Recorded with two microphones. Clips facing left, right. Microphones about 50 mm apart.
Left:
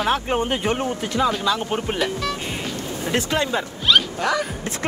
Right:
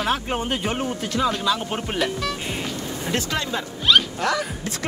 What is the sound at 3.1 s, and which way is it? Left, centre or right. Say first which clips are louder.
Speech: left 4 dB; left.